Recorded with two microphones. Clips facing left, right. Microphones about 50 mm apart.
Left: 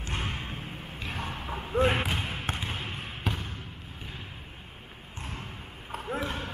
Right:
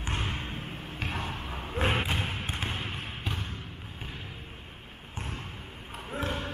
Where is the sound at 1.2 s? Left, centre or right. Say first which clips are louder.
Left 1 dB; left.